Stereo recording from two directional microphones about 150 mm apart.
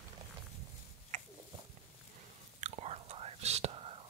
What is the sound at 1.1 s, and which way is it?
Biting, 50° right (ahead or behind).